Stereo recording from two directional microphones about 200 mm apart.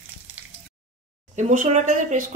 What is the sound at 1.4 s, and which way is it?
Speech, 35° right (ahead or behind).